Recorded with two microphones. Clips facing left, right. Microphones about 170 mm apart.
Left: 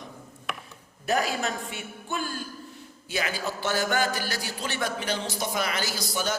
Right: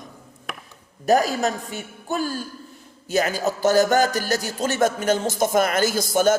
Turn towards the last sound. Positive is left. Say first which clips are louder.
# right 11 dB
turn(degrees=-50)  # may be behind; listen again after turning